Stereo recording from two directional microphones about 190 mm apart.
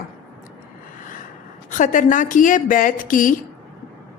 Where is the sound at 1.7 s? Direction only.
40° left (ahead or behind).